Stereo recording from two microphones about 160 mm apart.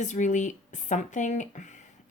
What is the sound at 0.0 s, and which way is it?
Speech, 50° left (ahead or behind).